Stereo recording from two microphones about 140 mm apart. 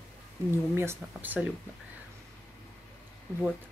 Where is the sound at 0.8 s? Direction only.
15° right (ahead or behind).